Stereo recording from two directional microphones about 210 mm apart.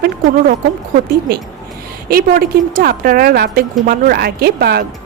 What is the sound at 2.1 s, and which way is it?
Speech, 45° right (ahead or behind).